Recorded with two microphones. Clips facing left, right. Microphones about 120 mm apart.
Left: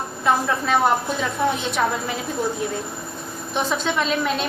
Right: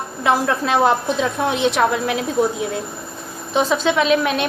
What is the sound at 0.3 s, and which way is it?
A woman's voice, 80° right.